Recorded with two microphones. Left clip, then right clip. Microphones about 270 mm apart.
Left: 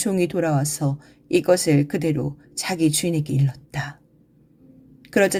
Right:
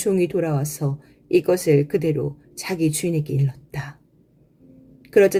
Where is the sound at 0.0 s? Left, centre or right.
Left.